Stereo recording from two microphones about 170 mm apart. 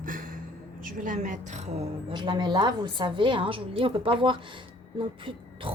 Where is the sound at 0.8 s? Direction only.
50° right (ahead or behind).